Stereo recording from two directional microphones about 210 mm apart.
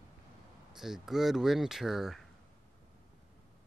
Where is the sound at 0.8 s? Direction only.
Centre (ahead or behind).